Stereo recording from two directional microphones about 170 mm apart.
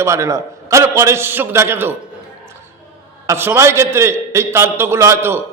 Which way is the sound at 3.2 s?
15° right (ahead or behind).